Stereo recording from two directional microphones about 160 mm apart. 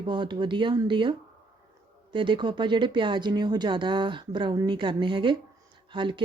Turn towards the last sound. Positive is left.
turn(degrees=-30)  # may be behind; listen again after turning